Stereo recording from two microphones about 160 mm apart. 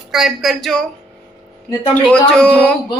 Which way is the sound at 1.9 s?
5° left (ahead or behind).